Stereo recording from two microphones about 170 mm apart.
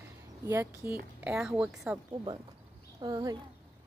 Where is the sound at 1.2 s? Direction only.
5° right (ahead or behind).